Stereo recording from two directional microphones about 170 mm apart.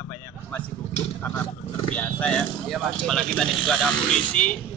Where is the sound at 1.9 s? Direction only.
5° left (ahead or behind).